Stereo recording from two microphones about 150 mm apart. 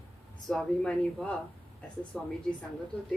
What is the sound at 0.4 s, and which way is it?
Speech, 5° left (ahead or behind).